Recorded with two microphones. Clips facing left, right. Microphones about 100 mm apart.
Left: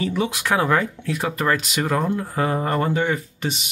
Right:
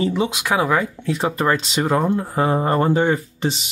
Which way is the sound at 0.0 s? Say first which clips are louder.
Right 3 dB; 25° right (ahead or behind).